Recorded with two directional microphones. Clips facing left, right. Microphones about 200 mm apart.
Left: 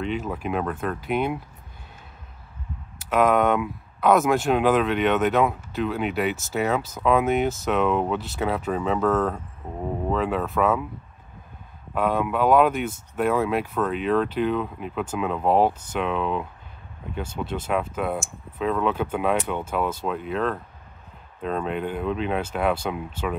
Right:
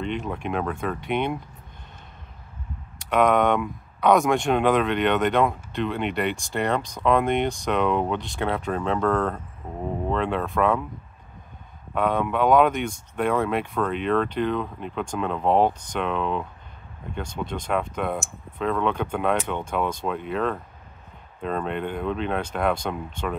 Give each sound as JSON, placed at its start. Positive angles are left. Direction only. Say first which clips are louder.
{"t": 0.0, "sound": "speech", "louder": "left 1 dB", "side_deg": 5}
{"t": 3.0, "sound": "speech", "louder": "even", "side_deg": 5}
{"t": 11.9, "sound": "speech", "louder": "even", "side_deg": 5}